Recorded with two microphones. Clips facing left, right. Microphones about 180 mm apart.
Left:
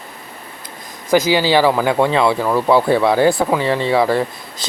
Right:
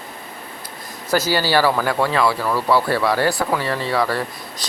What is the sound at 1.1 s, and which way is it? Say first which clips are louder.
Speech: left 4 dB; 15° left (ahead or behind).